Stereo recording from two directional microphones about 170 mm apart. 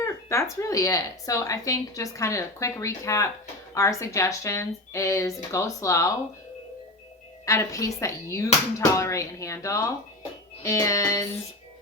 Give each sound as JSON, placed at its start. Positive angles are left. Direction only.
{"t": 0.0, "sound": "a sound", "side_deg": 15}
{"t": 0.6, "sound": "a woman's voice", "side_deg": 20}
{"t": 7.4, "sound": "speech", "side_deg": 20}